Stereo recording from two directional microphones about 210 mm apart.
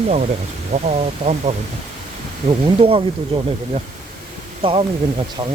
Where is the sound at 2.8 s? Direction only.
25° right (ahead or behind).